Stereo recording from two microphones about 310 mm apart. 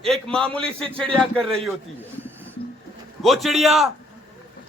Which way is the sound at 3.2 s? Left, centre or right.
Centre.